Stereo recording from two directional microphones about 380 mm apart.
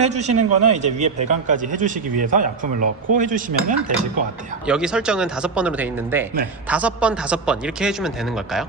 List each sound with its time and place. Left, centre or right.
0.0 s a man's voice: centre
4.6 s speech: centre